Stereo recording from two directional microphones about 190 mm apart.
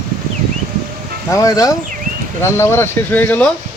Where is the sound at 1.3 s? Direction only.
15° left (ahead or behind).